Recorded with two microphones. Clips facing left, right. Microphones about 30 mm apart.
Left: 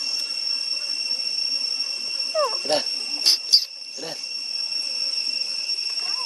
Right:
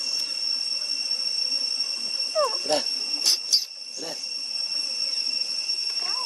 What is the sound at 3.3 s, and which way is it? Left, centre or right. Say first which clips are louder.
Cricket: left 5 dB; left.